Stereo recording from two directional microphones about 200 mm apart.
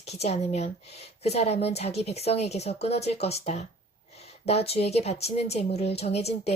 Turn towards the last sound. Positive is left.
turn(degrees=30)  # may be behind; listen again after turning